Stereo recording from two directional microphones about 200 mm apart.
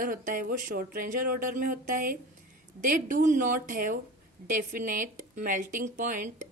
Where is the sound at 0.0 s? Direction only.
45° right (ahead or behind).